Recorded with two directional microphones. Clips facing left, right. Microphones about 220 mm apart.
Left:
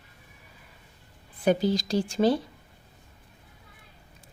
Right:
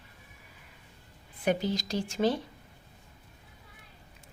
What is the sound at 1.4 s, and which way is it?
Speech, 35° left (ahead or behind).